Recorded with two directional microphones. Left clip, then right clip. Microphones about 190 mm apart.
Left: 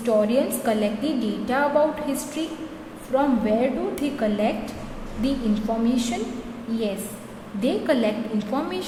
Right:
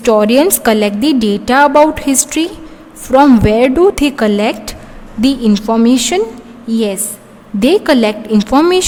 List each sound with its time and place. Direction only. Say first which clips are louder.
0.0 s a woman's voice: right 12 dB; 50° right (ahead or behind)